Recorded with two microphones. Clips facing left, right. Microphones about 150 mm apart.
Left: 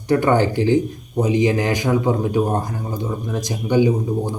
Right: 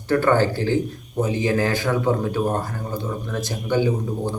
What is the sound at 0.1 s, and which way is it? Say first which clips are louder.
A man's voice: left 2 dB; 15° left (ahead or behind).